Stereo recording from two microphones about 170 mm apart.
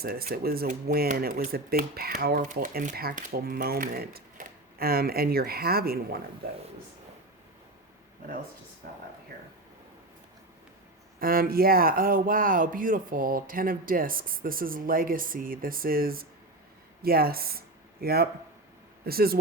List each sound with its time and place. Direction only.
0.0 s speech: 65° right (ahead or behind)
0.7 s speech: 50° right (ahead or behind)
2.2 s speech: 55° right (ahead or behind)
11.2 s speech: 60° right (ahead or behind)